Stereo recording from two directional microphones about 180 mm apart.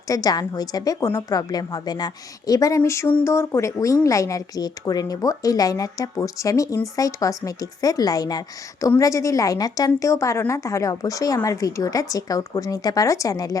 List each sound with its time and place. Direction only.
0.1 s a woman's voice: 20° left (ahead or behind)